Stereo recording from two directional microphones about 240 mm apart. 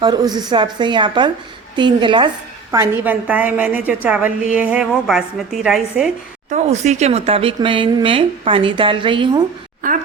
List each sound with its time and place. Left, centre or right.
0.0 s speech: centre
2.9 s a woman's voice: centre
6.5 s speech: right